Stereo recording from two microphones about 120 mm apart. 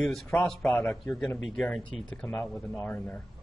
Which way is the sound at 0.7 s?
20° left (ahead or behind).